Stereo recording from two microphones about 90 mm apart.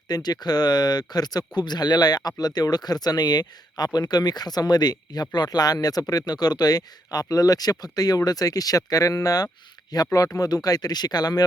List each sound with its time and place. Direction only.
0.1 s speech: 50° left (ahead or behind)